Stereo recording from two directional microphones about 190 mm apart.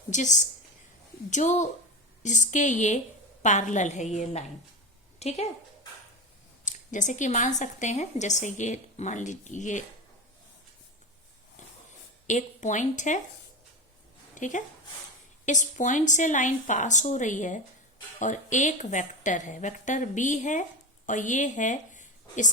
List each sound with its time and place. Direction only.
0.1 s a woman's voice: 40° left (ahead or behind)
6.7 s a woman's voice: 40° left (ahead or behind)
12.3 s a woman's voice: 40° left (ahead or behind)
14.3 s a woman's voice: 40° left (ahead or behind)